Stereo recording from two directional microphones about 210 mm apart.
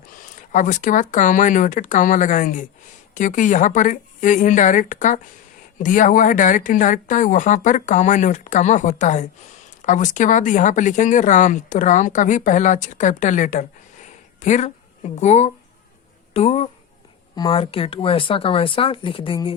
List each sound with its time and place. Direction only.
0.5 s speech: 35° left (ahead or behind)